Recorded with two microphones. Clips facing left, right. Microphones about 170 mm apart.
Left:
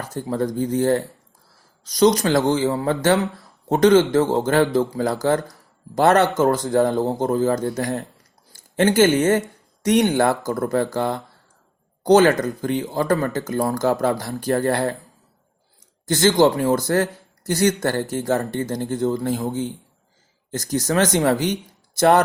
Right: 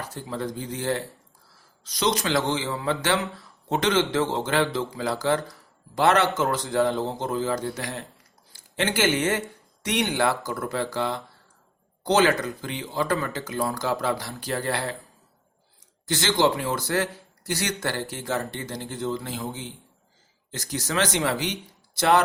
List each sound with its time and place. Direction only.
0.1 s a man's voice: 45° left (ahead or behind)
16.0 s a man's voice: 45° left (ahead or behind)